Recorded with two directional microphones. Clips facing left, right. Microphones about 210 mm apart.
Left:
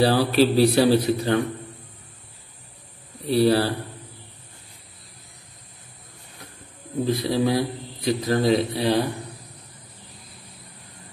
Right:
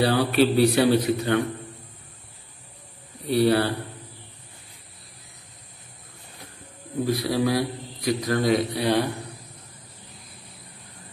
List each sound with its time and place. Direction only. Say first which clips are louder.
0.0 s a man's voice: left 2 dB; 30° left (ahead or behind)
3.3 s a man's voice: left 1 dB; 30° left (ahead or behind)
7.1 s a man's voice: left 1 dB; 25° left (ahead or behind)